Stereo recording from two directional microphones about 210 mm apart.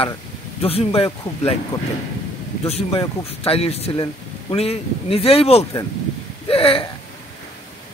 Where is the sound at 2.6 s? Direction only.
30° left (ahead or behind).